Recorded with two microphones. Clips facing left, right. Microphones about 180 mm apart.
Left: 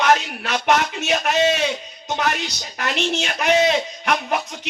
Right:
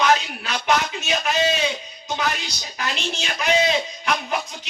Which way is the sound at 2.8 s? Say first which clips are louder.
Left 5 dB; 65° left (ahead or behind).